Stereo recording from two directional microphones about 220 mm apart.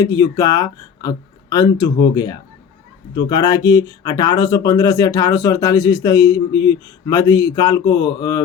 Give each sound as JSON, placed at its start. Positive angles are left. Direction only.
{"t": 0.0, "sound": "speech", "side_deg": 15}